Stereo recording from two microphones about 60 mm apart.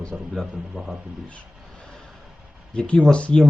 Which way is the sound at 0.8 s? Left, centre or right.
Centre.